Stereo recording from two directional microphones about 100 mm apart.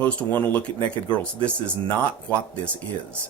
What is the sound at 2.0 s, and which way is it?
Speech, 15° left (ahead or behind).